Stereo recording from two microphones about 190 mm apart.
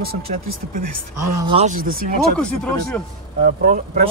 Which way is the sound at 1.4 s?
25° right (ahead or behind).